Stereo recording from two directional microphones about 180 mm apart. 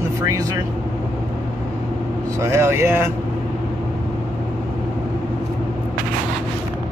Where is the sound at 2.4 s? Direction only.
15° right (ahead or behind).